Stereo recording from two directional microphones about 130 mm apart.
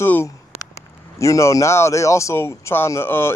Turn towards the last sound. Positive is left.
turn(degrees=20)  # may be behind; listen again after turning